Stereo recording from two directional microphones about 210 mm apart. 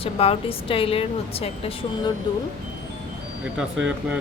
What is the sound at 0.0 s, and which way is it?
A woman's voice, 25° left (ahead or behind).